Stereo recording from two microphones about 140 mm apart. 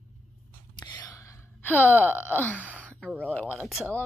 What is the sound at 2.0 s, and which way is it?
Speech, 15° left (ahead or behind).